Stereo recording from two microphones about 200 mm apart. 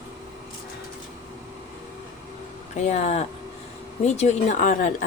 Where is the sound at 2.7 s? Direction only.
35° left (ahead or behind).